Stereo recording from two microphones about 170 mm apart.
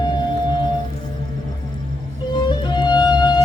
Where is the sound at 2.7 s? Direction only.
25° left (ahead or behind).